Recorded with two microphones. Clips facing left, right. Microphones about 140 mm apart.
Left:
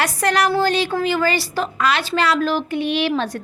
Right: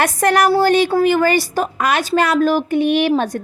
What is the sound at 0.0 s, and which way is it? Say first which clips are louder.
A woman's voice: right 4 dB; 50° right (ahead or behind).